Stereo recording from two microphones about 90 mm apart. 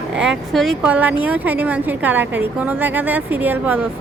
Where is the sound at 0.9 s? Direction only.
15° right (ahead or behind).